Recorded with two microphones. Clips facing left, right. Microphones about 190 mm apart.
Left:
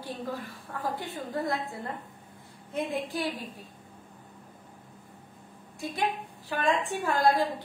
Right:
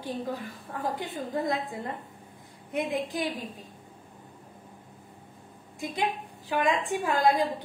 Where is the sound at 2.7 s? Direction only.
15° right (ahead or behind).